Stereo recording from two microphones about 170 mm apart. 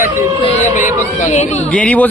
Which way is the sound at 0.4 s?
40° left (ahead or behind).